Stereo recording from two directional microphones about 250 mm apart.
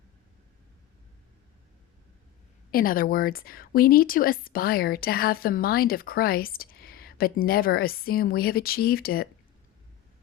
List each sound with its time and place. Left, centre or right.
2.7 s a woman's voice: left